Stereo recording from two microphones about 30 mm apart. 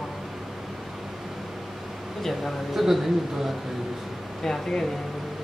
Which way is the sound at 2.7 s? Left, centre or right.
Centre.